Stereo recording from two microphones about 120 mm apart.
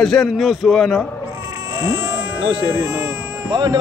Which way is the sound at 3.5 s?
35° right (ahead or behind).